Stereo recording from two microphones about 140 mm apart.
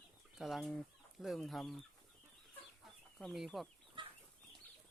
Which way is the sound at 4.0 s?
35° right (ahead or behind).